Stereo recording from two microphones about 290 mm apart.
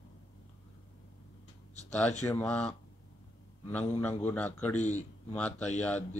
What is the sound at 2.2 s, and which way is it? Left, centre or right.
A man's voice, centre.